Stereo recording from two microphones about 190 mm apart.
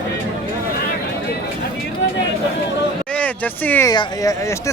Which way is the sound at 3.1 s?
5° left (ahead or behind).